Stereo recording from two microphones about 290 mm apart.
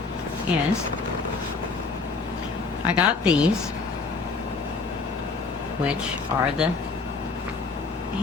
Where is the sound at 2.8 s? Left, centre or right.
Centre.